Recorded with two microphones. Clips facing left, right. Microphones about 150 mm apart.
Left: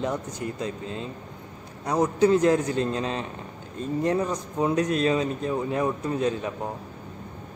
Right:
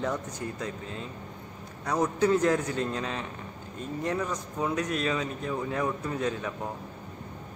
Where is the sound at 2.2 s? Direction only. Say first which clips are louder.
Left 5 dB; 25° left (ahead or behind).